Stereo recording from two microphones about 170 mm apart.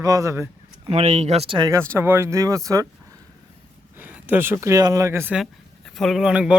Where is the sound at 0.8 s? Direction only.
40° right (ahead or behind).